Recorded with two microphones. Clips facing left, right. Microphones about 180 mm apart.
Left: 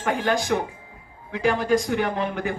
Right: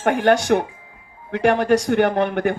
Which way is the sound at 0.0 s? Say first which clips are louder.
Right 7 dB; 75° right (ahead or behind).